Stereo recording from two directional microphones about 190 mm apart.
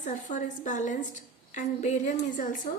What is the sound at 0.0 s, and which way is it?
A woman's voice, 40° left (ahead or behind).